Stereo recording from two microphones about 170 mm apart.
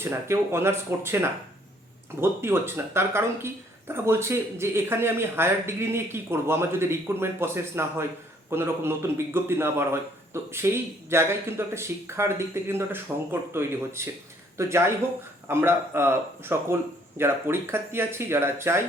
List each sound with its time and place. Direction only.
0.0 s speech: 15° right (ahead or behind)